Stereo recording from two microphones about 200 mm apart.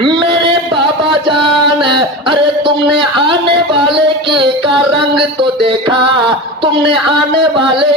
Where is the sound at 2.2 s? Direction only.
25° right (ahead or behind).